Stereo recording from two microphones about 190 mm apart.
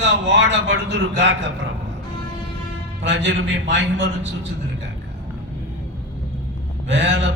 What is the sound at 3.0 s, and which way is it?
A man's voice, 70° right (ahead or behind).